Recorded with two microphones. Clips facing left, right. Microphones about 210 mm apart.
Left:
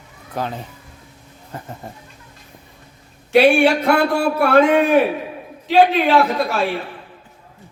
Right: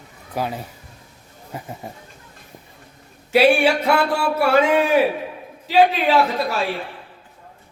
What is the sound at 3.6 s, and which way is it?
Speech, 50° left (ahead or behind).